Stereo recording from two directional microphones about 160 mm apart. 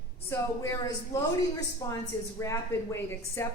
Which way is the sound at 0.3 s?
15° left (ahead or behind).